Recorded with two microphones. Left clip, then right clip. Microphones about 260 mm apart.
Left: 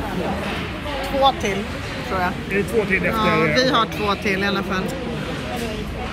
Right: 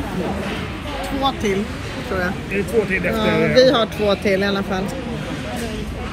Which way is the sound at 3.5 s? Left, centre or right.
Centre.